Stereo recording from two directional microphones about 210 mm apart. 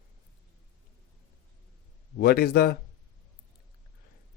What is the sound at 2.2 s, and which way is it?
Speech, 45° left (ahead or behind).